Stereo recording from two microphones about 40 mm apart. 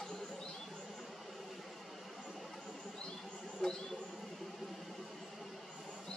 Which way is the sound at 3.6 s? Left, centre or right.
Centre.